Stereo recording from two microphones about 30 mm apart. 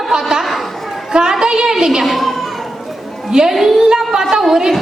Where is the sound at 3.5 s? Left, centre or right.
Centre.